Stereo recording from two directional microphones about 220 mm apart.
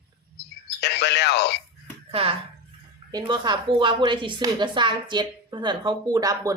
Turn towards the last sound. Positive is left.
turn(degrees=-15)  # may be behind; listen again after turning